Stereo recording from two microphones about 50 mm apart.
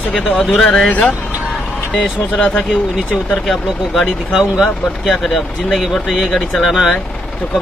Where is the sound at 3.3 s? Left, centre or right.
Centre.